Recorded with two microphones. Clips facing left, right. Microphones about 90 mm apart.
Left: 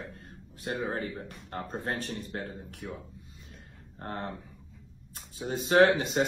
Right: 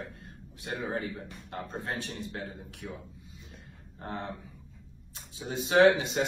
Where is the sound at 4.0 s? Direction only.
55° left (ahead or behind).